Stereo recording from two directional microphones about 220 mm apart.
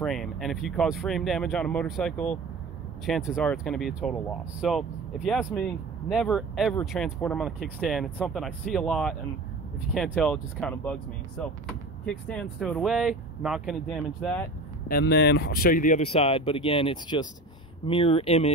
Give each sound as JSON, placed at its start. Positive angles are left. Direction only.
{"t": 0.0, "sound": "speech", "side_deg": 0}
{"t": 14.9, "sound": "speech", "side_deg": 45}